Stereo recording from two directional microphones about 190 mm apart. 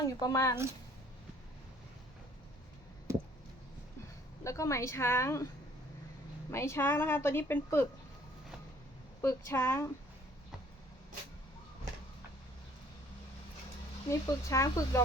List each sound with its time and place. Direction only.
0.0 s a woman's voice: 20° left (ahead or behind)
4.4 s a woman's voice: 15° left (ahead or behind)
6.5 s a woman's voice: 15° left (ahead or behind)
9.2 s a woman's voice: 15° left (ahead or behind)
14.1 s a woman's voice: 15° left (ahead or behind)